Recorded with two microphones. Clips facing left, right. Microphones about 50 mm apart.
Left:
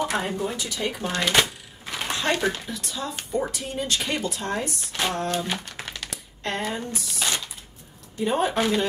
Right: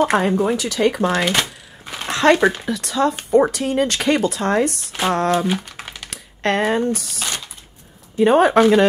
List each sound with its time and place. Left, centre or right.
0.0 s speech: right
0.4 s speech: right
2.0 s a sound: right
2.6 s speech: right
5.5 s crumpling: centre
6.0 s speech: right
7.2 s a sound: centre
8.2 s speech: right